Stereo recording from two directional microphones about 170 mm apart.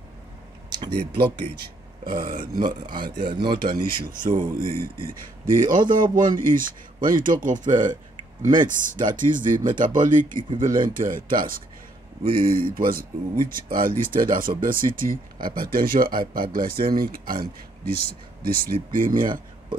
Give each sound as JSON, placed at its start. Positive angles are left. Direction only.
{"t": 2.0, "sound": "speech", "side_deg": -55}
{"t": 3.2, "sound": "speech", "side_deg": -25}
{"t": 3.8, "sound": "speech", "side_deg": -60}